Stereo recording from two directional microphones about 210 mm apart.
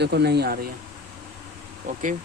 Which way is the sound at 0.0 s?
50° right (ahead or behind).